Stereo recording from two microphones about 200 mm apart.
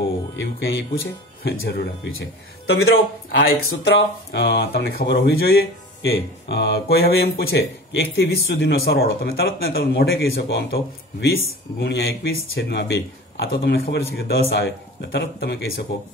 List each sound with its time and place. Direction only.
0.4 s speech: 60° left (ahead or behind)